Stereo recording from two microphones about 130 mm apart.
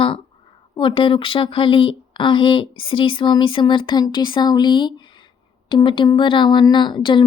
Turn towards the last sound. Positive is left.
turn(degrees=35)  # may be behind; listen again after turning